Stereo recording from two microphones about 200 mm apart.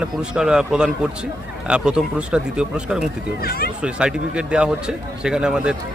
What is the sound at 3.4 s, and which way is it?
Speech, 50° left (ahead or behind).